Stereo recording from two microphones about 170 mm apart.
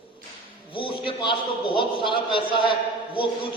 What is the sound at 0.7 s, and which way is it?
A man's voice, 30° left (ahead or behind).